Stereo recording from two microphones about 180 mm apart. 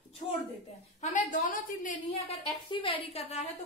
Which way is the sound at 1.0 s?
40° left (ahead or behind).